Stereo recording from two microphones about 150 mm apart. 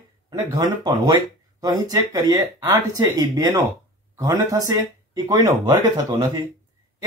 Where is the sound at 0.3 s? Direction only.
25° right (ahead or behind).